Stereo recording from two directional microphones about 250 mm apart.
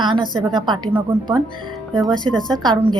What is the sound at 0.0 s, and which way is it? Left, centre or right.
Speech, centre.